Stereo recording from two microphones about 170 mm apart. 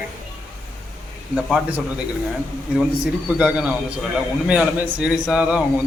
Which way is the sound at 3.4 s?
10° right (ahead or behind).